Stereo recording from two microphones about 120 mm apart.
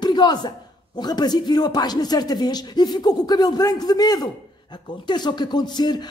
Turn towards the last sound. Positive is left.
turn(degrees=35)  # may be behind; listen again after turning